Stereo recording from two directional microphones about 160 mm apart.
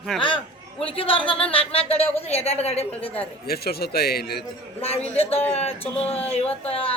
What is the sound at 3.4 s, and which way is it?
A man's voice, 75° left (ahead or behind).